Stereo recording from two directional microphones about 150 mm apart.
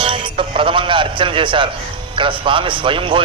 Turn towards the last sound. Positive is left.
turn(degrees=-35)  # may be behind; listen again after turning